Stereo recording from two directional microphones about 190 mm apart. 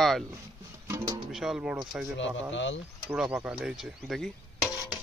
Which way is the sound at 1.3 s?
Centre (ahead or behind).